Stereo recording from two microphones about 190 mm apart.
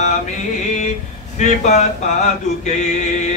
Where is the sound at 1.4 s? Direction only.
40° left (ahead or behind).